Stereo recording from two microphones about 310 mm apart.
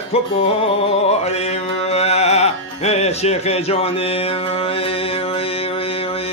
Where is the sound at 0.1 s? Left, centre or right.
Centre.